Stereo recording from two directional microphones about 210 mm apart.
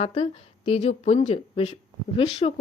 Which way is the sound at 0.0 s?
30° left (ahead or behind).